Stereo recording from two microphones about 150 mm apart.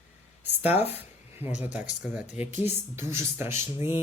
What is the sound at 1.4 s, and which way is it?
Speech, 10° right (ahead or behind).